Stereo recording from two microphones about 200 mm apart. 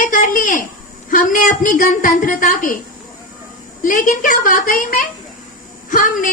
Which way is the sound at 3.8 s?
40° left (ahead or behind).